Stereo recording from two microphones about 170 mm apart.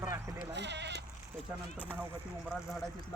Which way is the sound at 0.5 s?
90° right.